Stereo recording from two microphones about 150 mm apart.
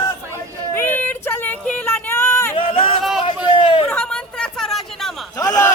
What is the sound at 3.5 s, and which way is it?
Hubbub, 35° left (ahead or behind).